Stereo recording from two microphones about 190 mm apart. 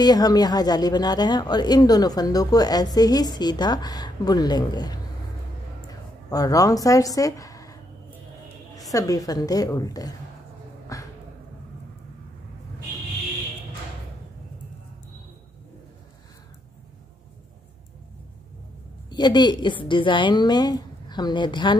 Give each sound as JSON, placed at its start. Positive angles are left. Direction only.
{"t": 0.0, "sound": "speech", "side_deg": 20}
{"t": 8.9, "sound": "speech", "side_deg": 20}
{"t": 10.9, "sound": "a sound", "side_deg": 15}
{"t": 19.0, "sound": "speech", "side_deg": 20}